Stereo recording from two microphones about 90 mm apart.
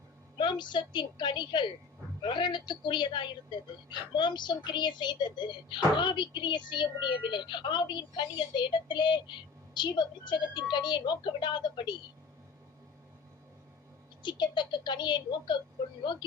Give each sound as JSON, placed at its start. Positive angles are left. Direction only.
{"t": 0.3, "sound": "a woman's voice", "side_deg": 60}
{"t": 14.2, "sound": "a woman's voice", "side_deg": 55}